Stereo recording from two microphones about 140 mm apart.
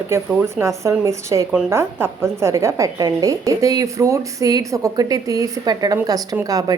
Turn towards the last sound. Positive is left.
turn(degrees=-25)  # may be behind; listen again after turning